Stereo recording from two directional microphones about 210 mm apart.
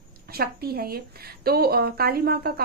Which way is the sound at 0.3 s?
45° right (ahead or behind).